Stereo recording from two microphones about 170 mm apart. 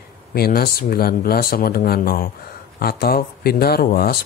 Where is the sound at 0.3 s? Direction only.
60° left (ahead or behind).